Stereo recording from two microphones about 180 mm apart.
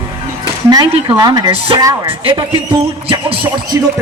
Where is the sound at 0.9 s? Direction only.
25° right (ahead or behind).